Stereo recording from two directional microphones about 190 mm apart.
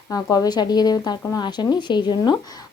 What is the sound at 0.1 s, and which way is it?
Speech, 20° left (ahead or behind).